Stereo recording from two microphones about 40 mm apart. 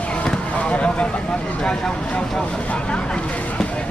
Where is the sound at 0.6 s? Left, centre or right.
Left.